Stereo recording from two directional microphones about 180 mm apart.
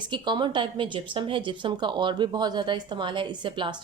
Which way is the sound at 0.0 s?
25° right (ahead or behind).